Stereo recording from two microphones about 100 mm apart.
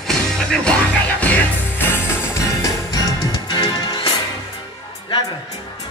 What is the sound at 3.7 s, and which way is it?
Music, 40° left (ahead or behind).